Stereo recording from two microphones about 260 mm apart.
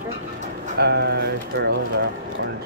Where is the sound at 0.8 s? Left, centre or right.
Right.